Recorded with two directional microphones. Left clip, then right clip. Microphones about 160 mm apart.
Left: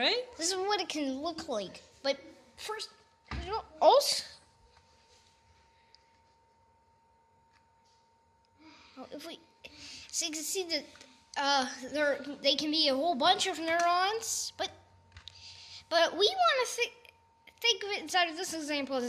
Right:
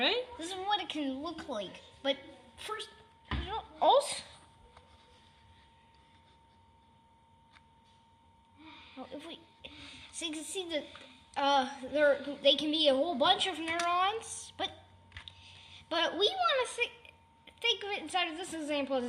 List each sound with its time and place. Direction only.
0.3 s a woman's voice: 45° left (ahead or behind)
3.8 s a child's voice: 30° left (ahead or behind)
9.0 s a sound: 20° left (ahead or behind)
10.2 s a child's voice: 25° left (ahead or behind)